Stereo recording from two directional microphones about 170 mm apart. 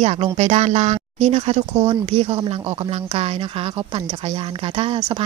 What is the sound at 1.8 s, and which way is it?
Speech, 25° right (ahead or behind).